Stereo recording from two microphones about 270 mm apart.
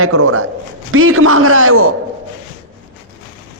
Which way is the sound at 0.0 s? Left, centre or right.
Right.